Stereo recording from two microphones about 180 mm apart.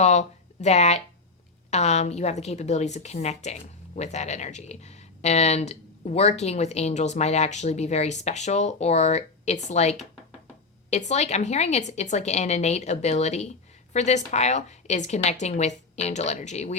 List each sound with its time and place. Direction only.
0.0 s a woman's voice: 40° left (ahead or behind)